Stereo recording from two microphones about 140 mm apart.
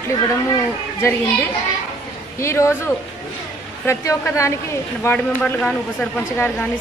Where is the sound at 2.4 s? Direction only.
20° left (ahead or behind).